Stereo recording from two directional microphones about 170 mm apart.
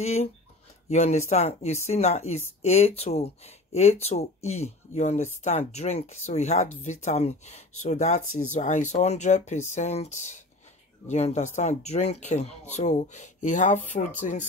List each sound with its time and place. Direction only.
0.0 s speech: 40° left (ahead or behind)